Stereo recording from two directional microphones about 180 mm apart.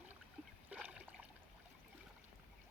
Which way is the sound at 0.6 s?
5° right (ahead or behind).